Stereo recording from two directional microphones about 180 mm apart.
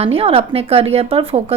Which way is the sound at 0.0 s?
35° right (ahead or behind).